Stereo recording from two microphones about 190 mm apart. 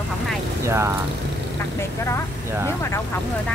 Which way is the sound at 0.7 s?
15° right (ahead or behind).